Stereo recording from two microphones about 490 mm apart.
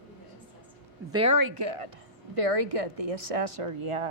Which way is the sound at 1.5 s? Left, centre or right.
Right.